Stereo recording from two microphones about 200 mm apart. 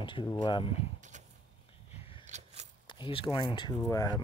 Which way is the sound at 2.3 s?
35° right (ahead or behind).